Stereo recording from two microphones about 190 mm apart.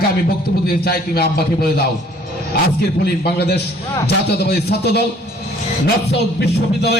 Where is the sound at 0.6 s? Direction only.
55° left (ahead or behind).